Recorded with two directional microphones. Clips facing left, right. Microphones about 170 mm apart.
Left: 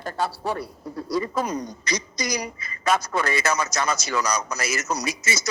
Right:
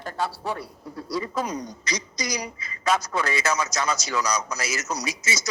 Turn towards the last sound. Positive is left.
turn(degrees=60)  # may be behind; listen again after turning